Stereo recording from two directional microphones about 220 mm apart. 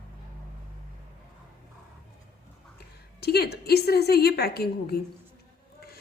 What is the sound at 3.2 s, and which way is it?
A woman's voice, 45° left (ahead or behind).